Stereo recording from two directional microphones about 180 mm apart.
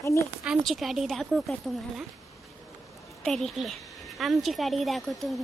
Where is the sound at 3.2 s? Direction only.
Centre (ahead or behind).